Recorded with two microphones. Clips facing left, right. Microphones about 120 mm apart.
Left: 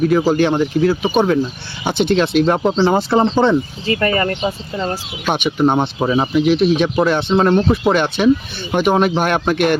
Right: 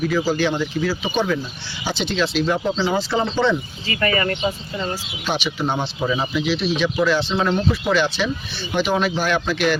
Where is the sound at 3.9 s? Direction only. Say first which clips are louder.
Left 4 dB; 35° left (ahead or behind).